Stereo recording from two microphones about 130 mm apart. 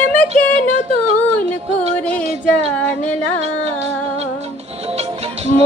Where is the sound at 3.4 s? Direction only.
55° right (ahead or behind).